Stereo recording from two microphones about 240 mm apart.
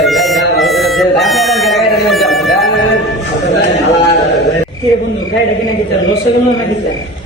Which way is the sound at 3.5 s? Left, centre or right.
Left.